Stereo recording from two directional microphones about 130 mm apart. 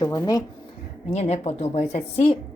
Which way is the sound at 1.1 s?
55° left (ahead or behind).